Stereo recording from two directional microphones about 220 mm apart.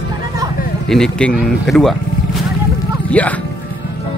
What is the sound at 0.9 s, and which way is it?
Speech, 5° left (ahead or behind).